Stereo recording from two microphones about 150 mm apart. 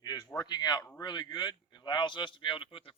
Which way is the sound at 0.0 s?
25° left (ahead or behind).